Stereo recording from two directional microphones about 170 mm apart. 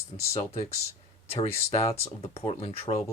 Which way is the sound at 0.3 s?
40° left (ahead or behind).